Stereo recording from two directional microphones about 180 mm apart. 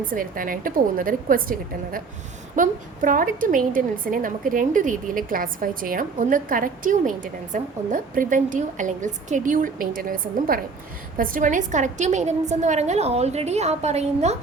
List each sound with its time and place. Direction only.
0.1 s a woman's voice: 50° right (ahead or behind)